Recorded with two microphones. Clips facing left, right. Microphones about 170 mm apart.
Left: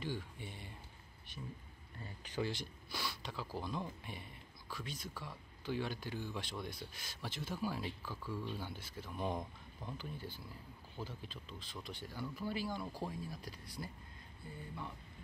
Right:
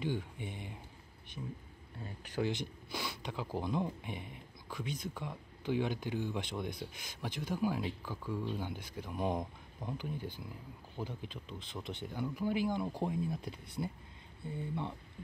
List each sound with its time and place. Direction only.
0.0 s speech: 15° right (ahead or behind)
2.0 s speech: centre (ahead or behind)
2.4 s speech: 20° right (ahead or behind)